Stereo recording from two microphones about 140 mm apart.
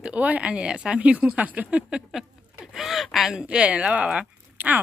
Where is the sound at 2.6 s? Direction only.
Centre (ahead or behind).